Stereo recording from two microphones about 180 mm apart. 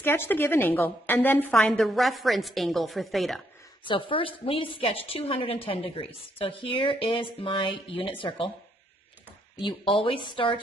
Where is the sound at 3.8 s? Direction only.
30° left (ahead or behind).